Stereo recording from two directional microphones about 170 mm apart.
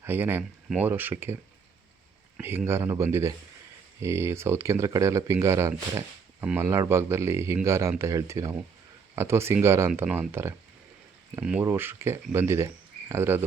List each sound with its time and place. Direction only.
0.0 s speech: 15° right (ahead or behind)
2.4 s speech: 10° right (ahead or behind)